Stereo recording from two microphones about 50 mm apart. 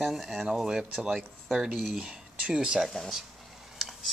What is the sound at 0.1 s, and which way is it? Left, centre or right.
Speech, centre.